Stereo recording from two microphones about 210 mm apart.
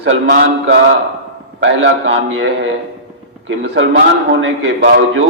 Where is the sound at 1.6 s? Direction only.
60° right (ahead or behind).